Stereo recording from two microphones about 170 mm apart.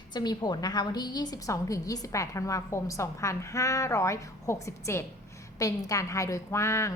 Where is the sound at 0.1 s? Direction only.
25° left (ahead or behind).